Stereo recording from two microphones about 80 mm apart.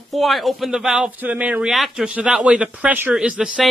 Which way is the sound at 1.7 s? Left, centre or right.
Centre.